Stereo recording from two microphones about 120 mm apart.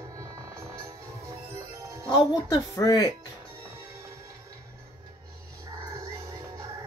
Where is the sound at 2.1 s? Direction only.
35° left (ahead or behind).